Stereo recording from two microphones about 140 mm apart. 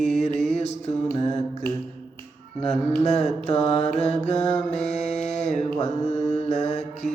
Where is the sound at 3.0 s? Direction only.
55° left (ahead or behind).